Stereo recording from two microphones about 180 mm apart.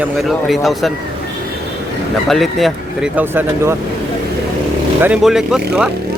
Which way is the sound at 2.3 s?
Centre (ahead or behind).